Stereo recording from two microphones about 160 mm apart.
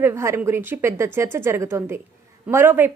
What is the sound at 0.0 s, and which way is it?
A woman's voice, 15° right (ahead or behind).